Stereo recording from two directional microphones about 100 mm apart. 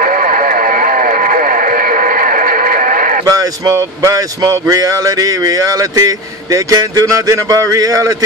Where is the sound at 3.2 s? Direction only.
35° right (ahead or behind).